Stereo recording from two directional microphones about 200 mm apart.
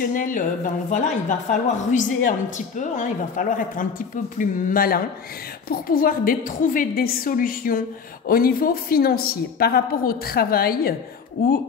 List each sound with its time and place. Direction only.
0.0 s a woman's voice: 40° left (ahead or behind)